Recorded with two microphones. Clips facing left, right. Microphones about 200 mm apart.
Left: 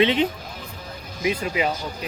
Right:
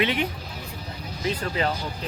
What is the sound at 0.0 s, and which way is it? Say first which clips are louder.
Speech: left 5 dB; 20° left (ahead or behind).